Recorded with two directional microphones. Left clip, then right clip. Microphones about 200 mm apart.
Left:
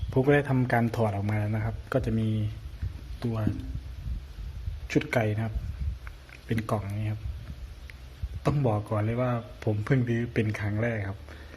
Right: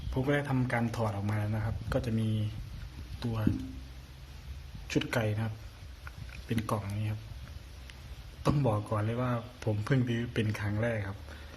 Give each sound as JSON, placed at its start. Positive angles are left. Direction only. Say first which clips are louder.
{"t": 0.1, "sound": "speech", "louder": "left 7 dB", "side_deg": 25}
{"t": 4.9, "sound": "speech", "louder": "left 5 dB", "side_deg": 15}
{"t": 6.5, "sound": "speech", "louder": "left 3 dB", "side_deg": 15}
{"t": 8.5, "sound": "speech", "louder": "left 5 dB", "side_deg": 10}